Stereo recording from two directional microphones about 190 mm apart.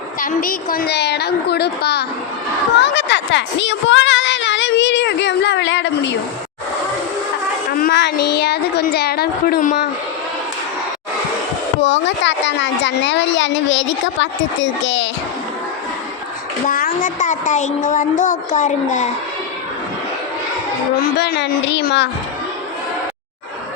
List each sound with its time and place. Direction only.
0.2 s a woman's voice: 45° left (ahead or behind); by 6.1 s 70° left (ahead or behind)
7.8 s a woman's voice: 55° left (ahead or behind)
11.8 s speech: 70° left (ahead or behind)
16.6 s speech: 45° left (ahead or behind)
20.9 s a woman's voice: 55° left (ahead or behind)